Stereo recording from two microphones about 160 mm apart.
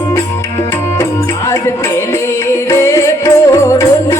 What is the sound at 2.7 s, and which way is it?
Music, 20° left (ahead or behind).